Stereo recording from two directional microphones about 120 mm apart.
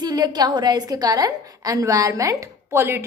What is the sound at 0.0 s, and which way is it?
A woman's voice, 35° right (ahead or behind).